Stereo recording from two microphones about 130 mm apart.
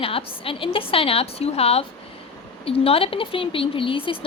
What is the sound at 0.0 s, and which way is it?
A woman's voice, 45° left (ahead or behind).